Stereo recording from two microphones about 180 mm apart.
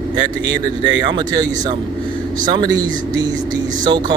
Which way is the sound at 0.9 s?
25° right (ahead or behind).